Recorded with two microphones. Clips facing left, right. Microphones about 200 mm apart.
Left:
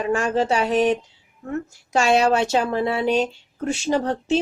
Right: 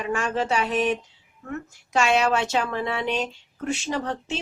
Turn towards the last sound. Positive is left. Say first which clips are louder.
# left 8 dB
turn(degrees=35)  # may be behind; listen again after turning